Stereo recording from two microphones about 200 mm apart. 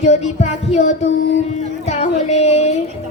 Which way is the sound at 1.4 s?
35° left (ahead or behind).